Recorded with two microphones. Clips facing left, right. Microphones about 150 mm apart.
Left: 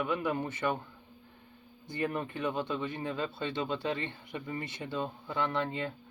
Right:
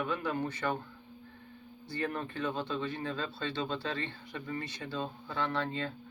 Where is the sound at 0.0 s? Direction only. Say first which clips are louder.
Left 2 dB; 15° left (ahead or behind).